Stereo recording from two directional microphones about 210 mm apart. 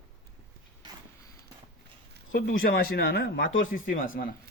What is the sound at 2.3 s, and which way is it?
Speech, 45° left (ahead or behind).